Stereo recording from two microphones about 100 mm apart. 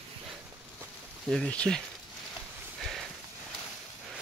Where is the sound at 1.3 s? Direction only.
10° left (ahead or behind).